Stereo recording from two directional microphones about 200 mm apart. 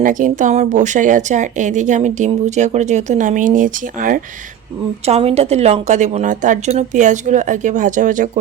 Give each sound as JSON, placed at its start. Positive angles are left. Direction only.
{"t": 0.0, "sound": "a woman's voice", "side_deg": -40}
{"t": 5.0, "sound": "a woman's voice", "side_deg": -30}